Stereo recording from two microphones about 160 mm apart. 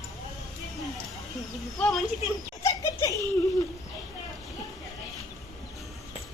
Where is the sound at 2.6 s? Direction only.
20° left (ahead or behind).